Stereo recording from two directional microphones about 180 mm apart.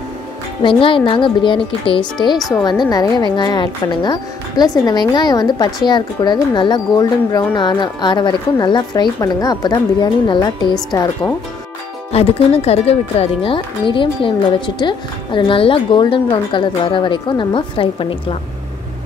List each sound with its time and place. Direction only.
0.6 s speech: 30° left (ahead or behind)
12.1 s speech: 35° left (ahead or behind)